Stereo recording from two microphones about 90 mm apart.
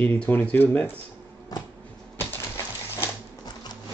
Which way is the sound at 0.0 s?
20° left (ahead or behind).